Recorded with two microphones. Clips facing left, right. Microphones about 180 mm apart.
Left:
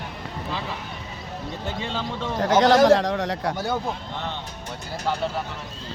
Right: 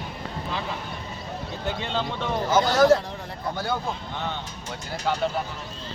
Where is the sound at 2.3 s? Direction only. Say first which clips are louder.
Left 4 dB; 85° left.